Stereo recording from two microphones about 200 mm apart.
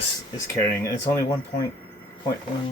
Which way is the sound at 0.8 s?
15° left (ahead or behind).